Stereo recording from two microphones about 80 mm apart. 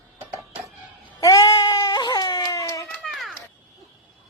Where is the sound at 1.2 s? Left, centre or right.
Left.